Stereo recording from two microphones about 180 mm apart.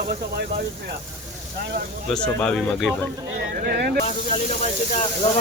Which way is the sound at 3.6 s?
55° right (ahead or behind).